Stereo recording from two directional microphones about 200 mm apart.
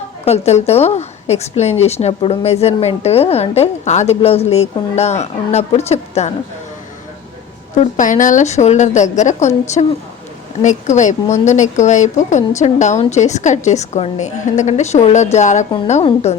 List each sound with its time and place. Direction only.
0.3 s a woman's voice: 30° left (ahead or behind)
7.8 s a woman's voice: 40° left (ahead or behind)